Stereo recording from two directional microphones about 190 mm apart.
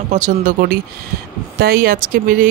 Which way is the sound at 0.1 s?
45° right (ahead or behind).